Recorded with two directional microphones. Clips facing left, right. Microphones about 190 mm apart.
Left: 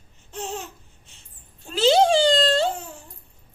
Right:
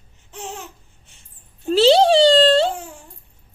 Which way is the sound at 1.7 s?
35° right (ahead or behind).